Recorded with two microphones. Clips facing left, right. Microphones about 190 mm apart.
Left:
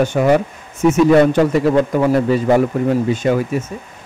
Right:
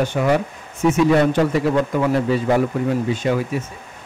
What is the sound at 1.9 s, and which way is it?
Speech, 45° left (ahead or behind).